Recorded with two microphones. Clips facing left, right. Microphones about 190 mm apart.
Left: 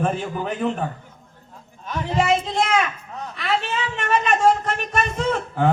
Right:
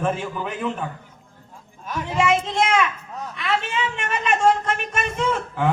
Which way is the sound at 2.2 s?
35° left (ahead or behind).